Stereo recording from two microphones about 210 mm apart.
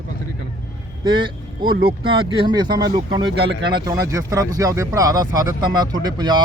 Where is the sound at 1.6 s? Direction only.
45° right (ahead or behind).